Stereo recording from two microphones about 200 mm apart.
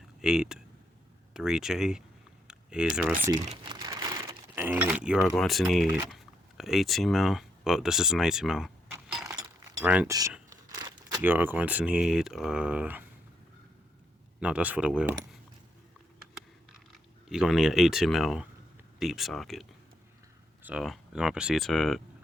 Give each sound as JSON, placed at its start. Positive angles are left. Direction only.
{"t": 0.2, "sound": "speech", "side_deg": -5}
{"t": 2.5, "sound": "a sound", "side_deg": -5}
{"t": 2.9, "sound": "speech", "side_deg": -5}
{"t": 3.4, "sound": "crumpling", "side_deg": -30}
{"t": 6.6, "sound": "speech", "side_deg": 0}
{"t": 9.2, "sound": "keys jangling", "side_deg": -15}
{"t": 9.8, "sound": "speech", "side_deg": -5}
{"t": 10.5, "sound": "a sound", "side_deg": -20}
{"t": 11.2, "sound": "speech", "side_deg": -10}
{"t": 14.4, "sound": "speech", "side_deg": -5}
{"t": 17.2, "sound": "speech", "side_deg": 0}
{"t": 20.7, "sound": "speech", "side_deg": 0}